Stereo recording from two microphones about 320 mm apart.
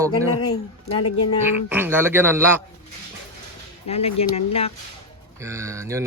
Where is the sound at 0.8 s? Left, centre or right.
Left.